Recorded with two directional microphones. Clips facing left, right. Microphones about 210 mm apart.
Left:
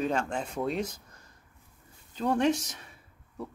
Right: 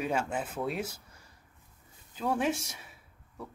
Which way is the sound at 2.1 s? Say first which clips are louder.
Left 4 dB; 5° right (ahead or behind).